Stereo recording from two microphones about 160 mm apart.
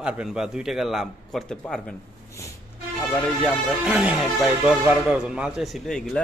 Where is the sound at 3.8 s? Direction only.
5° right (ahead or behind).